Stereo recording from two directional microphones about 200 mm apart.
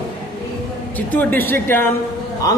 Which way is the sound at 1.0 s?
10° left (ahead or behind).